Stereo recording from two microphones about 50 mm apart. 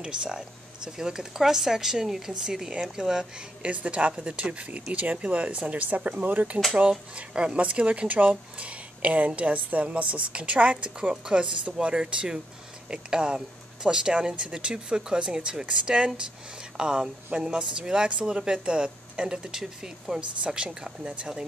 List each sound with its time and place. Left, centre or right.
0.0 s speech: centre
3.6 s speech: right